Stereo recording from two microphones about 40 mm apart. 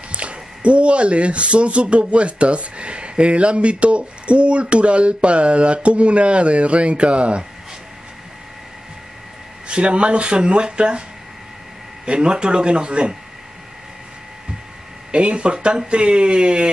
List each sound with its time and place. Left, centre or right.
0.1 s speech: right
9.7 s speech: right
12.1 s speech: right
15.0 s speech: right